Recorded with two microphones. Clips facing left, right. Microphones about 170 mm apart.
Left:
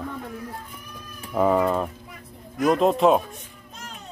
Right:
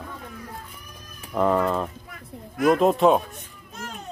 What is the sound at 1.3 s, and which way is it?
Speech, 5° left (ahead or behind).